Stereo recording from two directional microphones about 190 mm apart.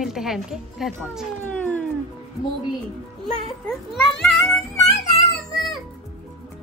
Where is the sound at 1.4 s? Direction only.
10° left (ahead or behind).